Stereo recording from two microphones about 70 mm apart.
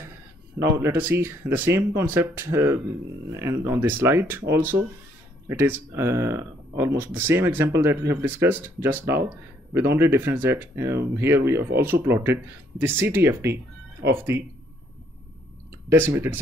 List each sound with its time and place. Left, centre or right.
0.9 s speech: right
4.0 s speech: right
15.9 s speech: right